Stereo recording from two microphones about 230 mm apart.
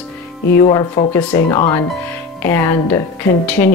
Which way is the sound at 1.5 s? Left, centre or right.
Centre.